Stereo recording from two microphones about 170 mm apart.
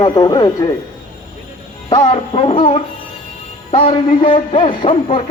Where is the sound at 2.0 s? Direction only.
35° left (ahead or behind).